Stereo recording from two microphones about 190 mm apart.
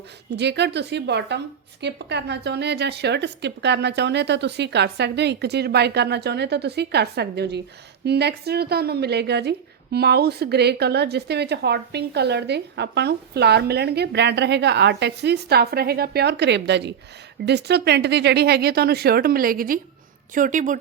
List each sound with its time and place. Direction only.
0.3 s a woman's voice: 65° right (ahead or behind); by 20.7 s 40° right (ahead or behind)